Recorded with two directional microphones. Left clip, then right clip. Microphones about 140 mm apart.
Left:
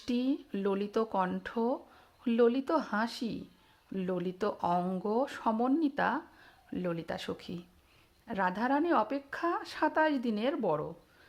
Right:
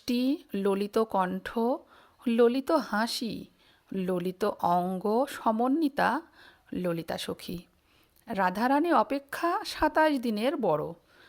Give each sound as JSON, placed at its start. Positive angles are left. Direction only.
{"t": 0.0, "sound": "speech", "side_deg": -45}